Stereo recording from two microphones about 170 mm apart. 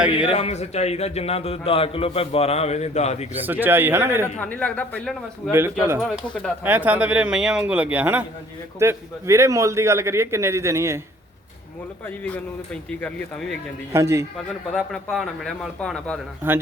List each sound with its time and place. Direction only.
0.2 s speech: 35° left (ahead or behind)
3.3 s a man's voice: 10° right (ahead or behind)
4.4 s speech: 10° left (ahead or behind)
5.5 s a man's voice: 15° right (ahead or behind)
6.0 s speech: 5° left (ahead or behind)
6.7 s a man's voice: 10° right (ahead or behind)
12.0 s speech: 10° left (ahead or behind)
13.9 s a man's voice: 15° right (ahead or behind)
14.3 s speech: 5° left (ahead or behind)